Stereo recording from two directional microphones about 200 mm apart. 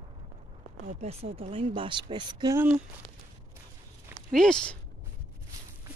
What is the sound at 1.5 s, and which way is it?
Speech, 25° right (ahead or behind).